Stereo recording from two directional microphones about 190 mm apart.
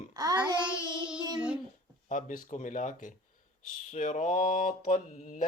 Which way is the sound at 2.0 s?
40° left (ahead or behind).